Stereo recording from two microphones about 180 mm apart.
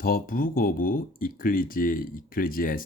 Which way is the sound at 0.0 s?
50° left (ahead or behind).